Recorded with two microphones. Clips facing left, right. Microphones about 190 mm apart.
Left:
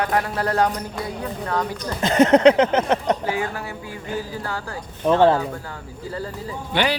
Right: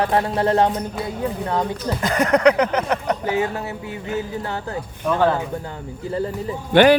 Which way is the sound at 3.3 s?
20° right (ahead or behind).